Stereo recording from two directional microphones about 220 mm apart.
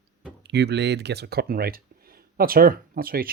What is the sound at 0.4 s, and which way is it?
Speech, 50° right (ahead or behind).